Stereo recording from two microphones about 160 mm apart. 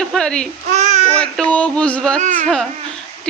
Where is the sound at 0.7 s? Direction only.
45° right (ahead or behind).